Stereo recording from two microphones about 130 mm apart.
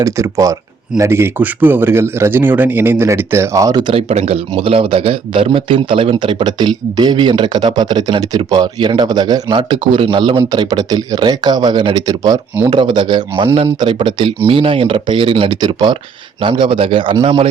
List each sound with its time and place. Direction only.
0.0 s speech: 25° right (ahead or behind)
3.9 s a man's voice: 50° right (ahead or behind)
13.4 s speech: 50° right (ahead or behind)
13.7 s a man's voice: 35° right (ahead or behind)